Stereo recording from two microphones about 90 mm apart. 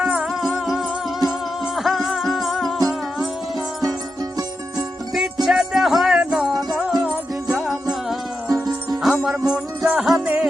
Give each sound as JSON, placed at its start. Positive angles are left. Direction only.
{"t": 0.0, "sound": "music", "side_deg": -5}
{"t": 4.2, "sound": "music", "side_deg": -40}
{"t": 5.1, "sound": "music", "side_deg": -5}
{"t": 8.4, "sound": "music", "side_deg": -45}
{"t": 9.0, "sound": "music", "side_deg": 0}